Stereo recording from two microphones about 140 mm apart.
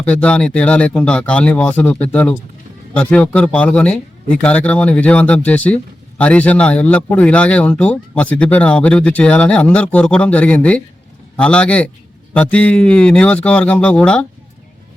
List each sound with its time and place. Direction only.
0.0 s speech: 10° left (ahead or behind)